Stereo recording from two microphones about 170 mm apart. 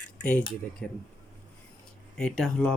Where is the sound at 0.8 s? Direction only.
5° left (ahead or behind).